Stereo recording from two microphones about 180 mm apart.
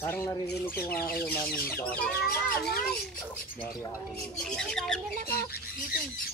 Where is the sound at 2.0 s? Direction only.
60° left (ahead or behind).